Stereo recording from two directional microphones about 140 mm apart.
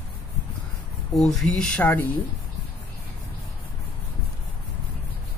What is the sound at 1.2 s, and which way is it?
Speech, centre (ahead or behind).